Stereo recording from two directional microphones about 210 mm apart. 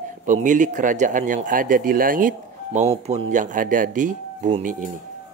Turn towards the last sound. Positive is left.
turn(degrees=-35)  # may be behind; listen again after turning